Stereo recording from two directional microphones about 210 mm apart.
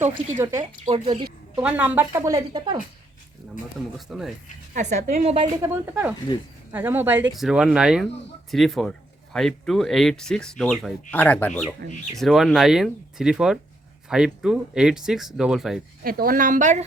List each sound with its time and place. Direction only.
0.0 s speech: 10° right (ahead or behind)
0.9 s a woman's voice: 25° right (ahead or behind)
1.5 s speech: 5° right (ahead or behind)
3.9 s speech: centre (ahead or behind)
4.7 s speech: 35° right (ahead or behind)
5.6 s speech: 10° right (ahead or behind)
16.0 s speech: 45° right (ahead or behind)